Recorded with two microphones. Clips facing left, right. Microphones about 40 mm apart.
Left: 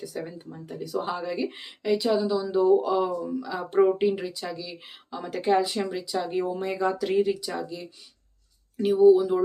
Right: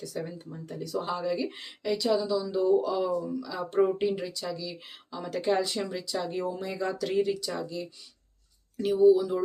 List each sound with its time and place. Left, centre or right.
0.0 s speech: centre
7.0 s speech: centre
8.8 s speech: left